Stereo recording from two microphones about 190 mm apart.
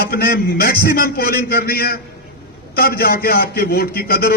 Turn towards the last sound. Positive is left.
turn(degrees=55)  # may be behind; listen again after turning